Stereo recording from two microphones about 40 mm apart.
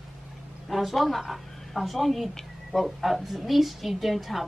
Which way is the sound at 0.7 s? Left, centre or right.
Centre.